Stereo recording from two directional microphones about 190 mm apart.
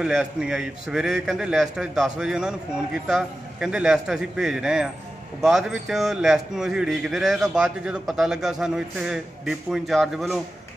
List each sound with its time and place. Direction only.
0.0 s a man's voice: 5° right (ahead or behind)